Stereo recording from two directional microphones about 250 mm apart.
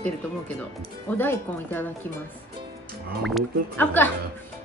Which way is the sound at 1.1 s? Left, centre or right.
Centre.